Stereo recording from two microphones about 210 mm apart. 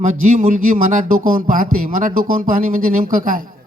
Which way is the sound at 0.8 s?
40° right (ahead or behind).